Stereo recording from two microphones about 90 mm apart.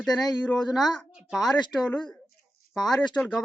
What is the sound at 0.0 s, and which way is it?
Speech, 5° left (ahead or behind).